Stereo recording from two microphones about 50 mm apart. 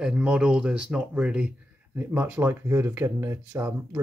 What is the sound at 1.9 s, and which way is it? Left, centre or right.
Speech, right.